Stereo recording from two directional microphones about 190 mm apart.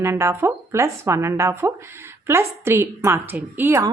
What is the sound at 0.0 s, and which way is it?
Speech, 15° right (ahead or behind).